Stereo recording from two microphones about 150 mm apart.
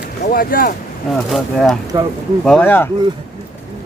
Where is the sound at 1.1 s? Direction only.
Centre (ahead or behind).